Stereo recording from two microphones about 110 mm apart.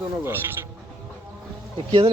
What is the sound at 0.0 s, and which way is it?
Speech, 20° right (ahead or behind).